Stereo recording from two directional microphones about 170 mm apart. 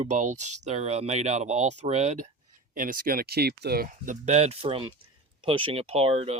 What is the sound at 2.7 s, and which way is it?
Speech, 55° right (ahead or behind).